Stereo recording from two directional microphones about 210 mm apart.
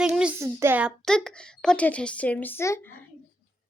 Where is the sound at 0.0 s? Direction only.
5° right (ahead or behind); by 2.8 s 15° left (ahead or behind).